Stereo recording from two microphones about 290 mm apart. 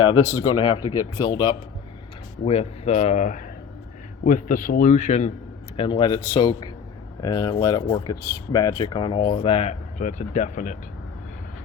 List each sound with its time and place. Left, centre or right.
0.4 s a man's voice: centre